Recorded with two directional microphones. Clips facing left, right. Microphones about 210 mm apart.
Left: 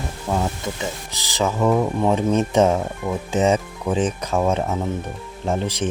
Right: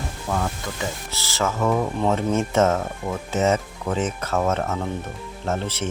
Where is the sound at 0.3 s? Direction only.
20° left (ahead or behind).